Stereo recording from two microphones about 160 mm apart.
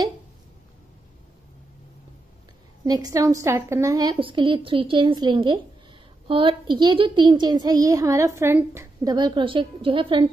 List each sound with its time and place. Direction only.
2.8 s a child's voice: 25° right (ahead or behind)
9.1 s a woman's voice: 30° right (ahead or behind)